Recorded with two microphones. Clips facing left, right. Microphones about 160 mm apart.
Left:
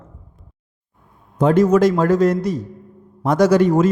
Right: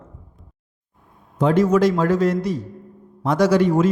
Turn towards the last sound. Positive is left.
turn(degrees=45)  # may be behind; listen again after turning